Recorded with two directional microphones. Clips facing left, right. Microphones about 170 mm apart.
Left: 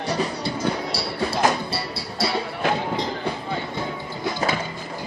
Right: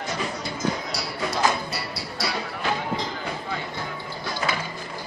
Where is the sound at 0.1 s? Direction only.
35° left (ahead or behind).